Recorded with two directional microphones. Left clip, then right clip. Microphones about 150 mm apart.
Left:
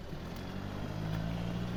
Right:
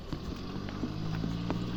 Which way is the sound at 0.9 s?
90° left.